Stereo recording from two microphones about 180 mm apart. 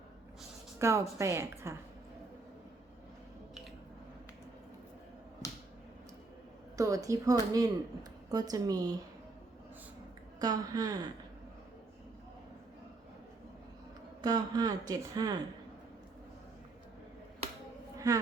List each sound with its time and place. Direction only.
0.8 s a woman's voice: 15° right (ahead or behind)
6.7 s a woman's voice: 20° right (ahead or behind)
10.4 s speech: 20° right (ahead or behind)
14.2 s speech: 20° right (ahead or behind)
17.9 s a sound: 20° right (ahead or behind)